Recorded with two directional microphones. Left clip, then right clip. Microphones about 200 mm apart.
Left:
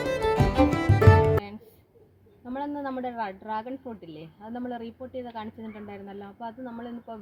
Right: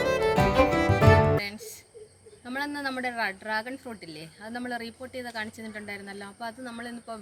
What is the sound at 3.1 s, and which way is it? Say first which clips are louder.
Speech: right 3 dB; 35° right (ahead or behind).